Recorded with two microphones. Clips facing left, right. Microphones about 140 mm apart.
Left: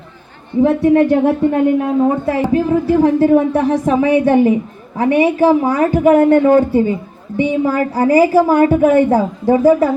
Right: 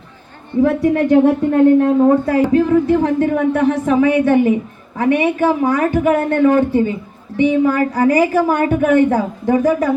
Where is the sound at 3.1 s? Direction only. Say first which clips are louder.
Left 4 dB; 30° left (ahead or behind).